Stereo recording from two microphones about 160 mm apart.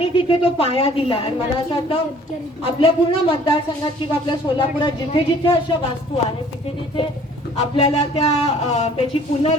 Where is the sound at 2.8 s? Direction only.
35° left (ahead or behind).